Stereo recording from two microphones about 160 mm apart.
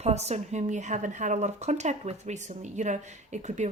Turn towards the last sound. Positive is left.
turn(degrees=-45)  # may be behind; listen again after turning